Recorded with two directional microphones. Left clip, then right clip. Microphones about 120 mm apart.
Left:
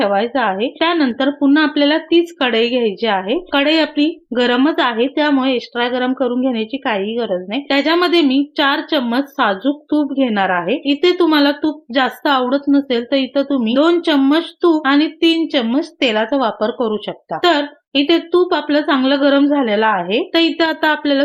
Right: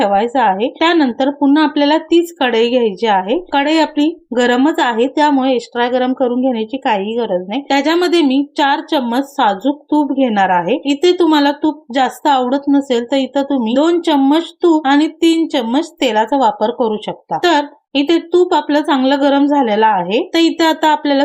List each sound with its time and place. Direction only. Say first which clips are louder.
0.0 s a woman's voice: right 3 dB; 35° right (ahead or behind)